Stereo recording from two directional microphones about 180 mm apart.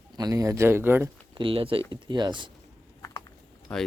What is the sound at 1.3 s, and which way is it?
Speech, 30° right (ahead or behind).